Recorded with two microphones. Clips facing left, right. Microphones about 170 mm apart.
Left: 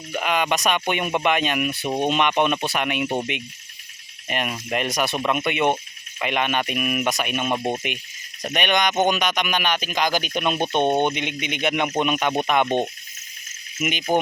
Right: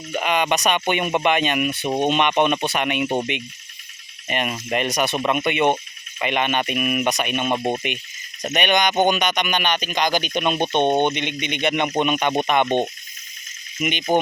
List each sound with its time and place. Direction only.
0.2 s speech: centre (ahead or behind)
4.3 s speech: centre (ahead or behind)
13.7 s speech: 5° left (ahead or behind)